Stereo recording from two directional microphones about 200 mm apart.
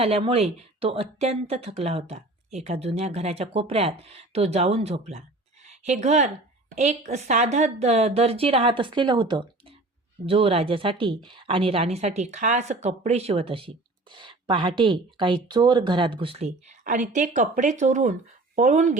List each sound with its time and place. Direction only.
0.0 s a woman's voice: 30° right (ahead or behind)